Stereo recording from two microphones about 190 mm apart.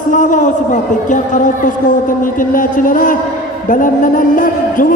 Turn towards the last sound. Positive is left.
turn(degrees=45)  # may be behind; listen again after turning